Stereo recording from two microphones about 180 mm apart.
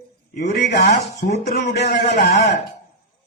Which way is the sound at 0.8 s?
40° left (ahead or behind).